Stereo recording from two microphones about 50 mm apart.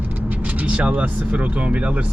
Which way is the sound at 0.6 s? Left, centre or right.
Right.